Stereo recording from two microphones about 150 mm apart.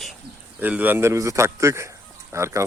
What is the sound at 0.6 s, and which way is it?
A man's voice, 10° right (ahead or behind).